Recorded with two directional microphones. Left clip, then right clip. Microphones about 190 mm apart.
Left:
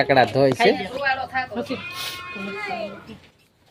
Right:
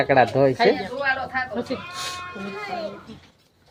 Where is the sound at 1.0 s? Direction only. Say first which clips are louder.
Left 1 dB; 60° right (ahead or behind).